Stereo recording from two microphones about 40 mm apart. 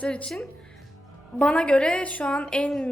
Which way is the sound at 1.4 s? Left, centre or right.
Left.